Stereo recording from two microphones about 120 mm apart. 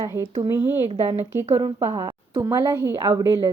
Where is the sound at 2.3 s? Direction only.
25° right (ahead or behind).